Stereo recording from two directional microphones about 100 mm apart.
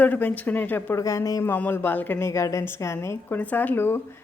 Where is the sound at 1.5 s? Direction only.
20° left (ahead or behind).